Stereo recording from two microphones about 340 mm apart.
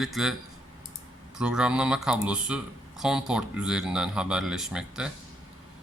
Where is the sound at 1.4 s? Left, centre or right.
Centre.